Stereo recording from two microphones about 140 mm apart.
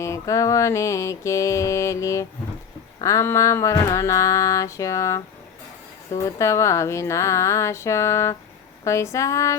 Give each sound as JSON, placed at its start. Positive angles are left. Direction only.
{"t": 0.0, "sound": "mantra", "side_deg": 20}
{"t": 6.2, "sound": "mantra", "side_deg": 20}